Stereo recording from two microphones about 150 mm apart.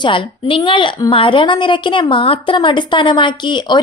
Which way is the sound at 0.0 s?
35° left (ahead or behind).